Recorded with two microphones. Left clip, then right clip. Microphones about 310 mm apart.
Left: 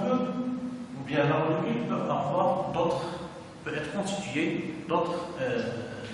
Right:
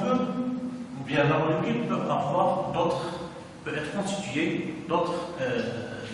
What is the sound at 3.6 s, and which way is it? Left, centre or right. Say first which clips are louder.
A man's voice: right 1 dB; centre.